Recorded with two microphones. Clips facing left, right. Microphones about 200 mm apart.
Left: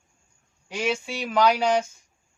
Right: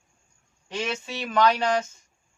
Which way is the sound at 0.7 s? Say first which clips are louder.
Left 3 dB; 10° left (ahead or behind).